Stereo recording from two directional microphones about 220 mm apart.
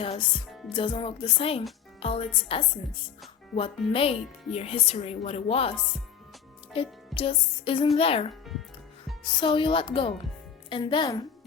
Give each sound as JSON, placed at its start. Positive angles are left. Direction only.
{"t": 0.0, "sound": "a woman's voice", "side_deg": 25}
{"t": 6.7, "sound": "a woman's voice", "side_deg": 25}